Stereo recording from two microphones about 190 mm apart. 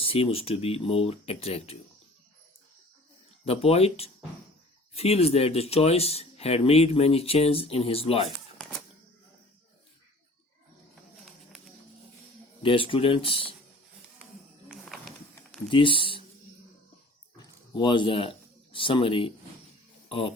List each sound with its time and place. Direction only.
0.0 s speech: 30° left (ahead or behind)
3.4 s speech: 30° left (ahead or behind)
8.5 s typewriter: 5° left (ahead or behind)
12.6 s speech: 25° left (ahead or behind)
15.7 s speech: 25° left (ahead or behind)
17.3 s a sound: 25° left (ahead or behind)
20.1 s speech: 30° left (ahead or behind)